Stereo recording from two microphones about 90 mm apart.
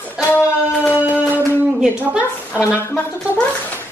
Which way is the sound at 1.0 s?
20° right (ahead or behind).